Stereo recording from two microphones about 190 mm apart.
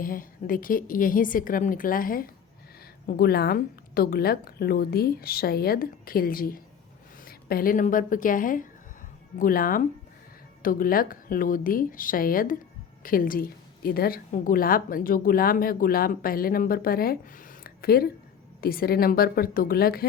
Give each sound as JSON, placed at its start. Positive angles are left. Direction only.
{"t": 0.0, "sound": "a woman's voice", "side_deg": 50}